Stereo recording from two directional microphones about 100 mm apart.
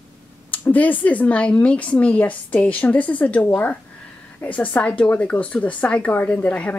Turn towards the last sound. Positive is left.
turn(degrees=15)  # may be behind; listen again after turning